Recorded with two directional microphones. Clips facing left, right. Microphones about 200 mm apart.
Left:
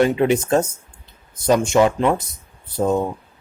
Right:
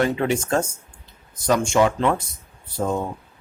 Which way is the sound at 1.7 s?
15° left (ahead or behind).